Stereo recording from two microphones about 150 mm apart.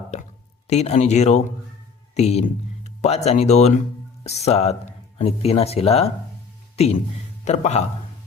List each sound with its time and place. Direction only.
0.1 s speech: 50° left (ahead or behind)